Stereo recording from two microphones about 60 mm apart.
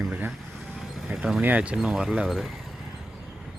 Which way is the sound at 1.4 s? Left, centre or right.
Right.